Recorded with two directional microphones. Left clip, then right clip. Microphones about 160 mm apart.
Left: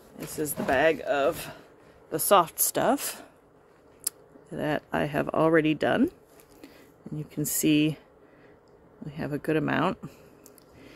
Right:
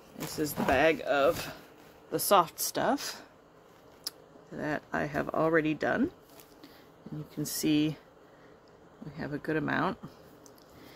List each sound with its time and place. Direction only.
0.3 s speech: 30° left (ahead or behind)
2.0 s a woman's voice: 35° left (ahead or behind); by 6.0 s 55° left (ahead or behind)
7.2 s a woman's voice: 45° left (ahead or behind)
9.1 s a woman's voice: 50° left (ahead or behind)